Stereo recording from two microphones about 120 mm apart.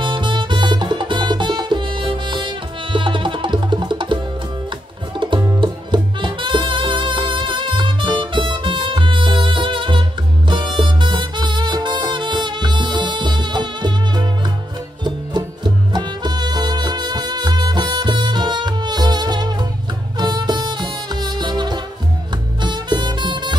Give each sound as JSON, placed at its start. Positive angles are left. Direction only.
{"t": 0.0, "sound": "music", "side_deg": -40}